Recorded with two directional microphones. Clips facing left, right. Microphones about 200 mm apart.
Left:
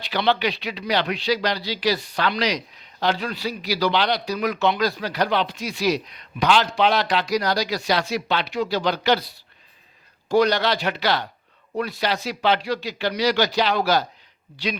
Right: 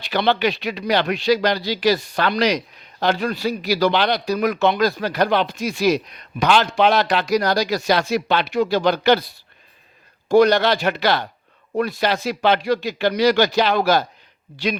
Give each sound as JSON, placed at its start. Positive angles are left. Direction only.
{"t": 0.0, "sound": "a man's voice", "side_deg": -50}